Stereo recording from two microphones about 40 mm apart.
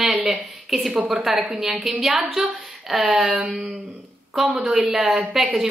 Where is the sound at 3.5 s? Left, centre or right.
Centre.